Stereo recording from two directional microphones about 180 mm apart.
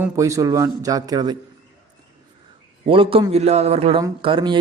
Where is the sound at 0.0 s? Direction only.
15° right (ahead or behind).